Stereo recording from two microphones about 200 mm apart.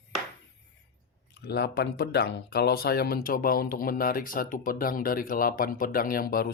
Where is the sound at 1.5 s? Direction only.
55° left (ahead or behind).